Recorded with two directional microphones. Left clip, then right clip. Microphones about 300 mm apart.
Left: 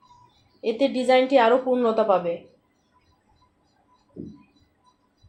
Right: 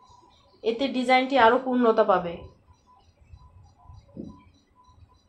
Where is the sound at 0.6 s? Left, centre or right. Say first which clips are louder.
Left 3 dB; centre.